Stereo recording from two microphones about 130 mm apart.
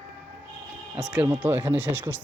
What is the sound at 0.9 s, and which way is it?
Speech, 10° right (ahead or behind).